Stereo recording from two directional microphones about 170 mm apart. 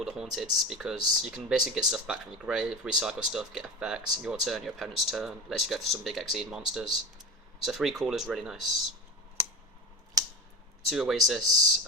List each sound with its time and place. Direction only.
0.0 s speech: centre (ahead or behind)
10.2 s a sound: 20° right (ahead or behind)
10.8 s speech: centre (ahead or behind)